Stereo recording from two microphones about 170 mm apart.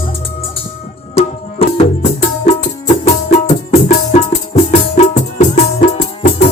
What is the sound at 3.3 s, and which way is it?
Music, 45° left (ahead or behind).